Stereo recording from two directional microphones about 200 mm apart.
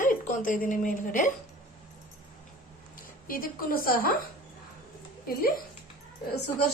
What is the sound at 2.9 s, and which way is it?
A woman's voice, 45° left (ahead or behind).